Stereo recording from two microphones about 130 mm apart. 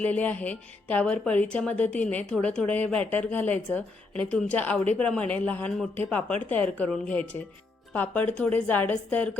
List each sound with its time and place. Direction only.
0.0 s speech: 10° left (ahead or behind)